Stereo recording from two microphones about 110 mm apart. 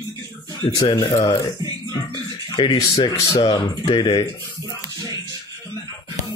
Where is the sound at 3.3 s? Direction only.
45° left (ahead or behind).